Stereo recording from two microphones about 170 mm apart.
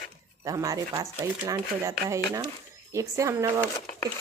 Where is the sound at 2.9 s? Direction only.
15° right (ahead or behind).